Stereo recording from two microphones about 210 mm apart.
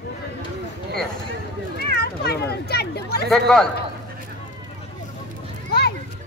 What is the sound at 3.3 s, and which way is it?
Speech, centre (ahead or behind).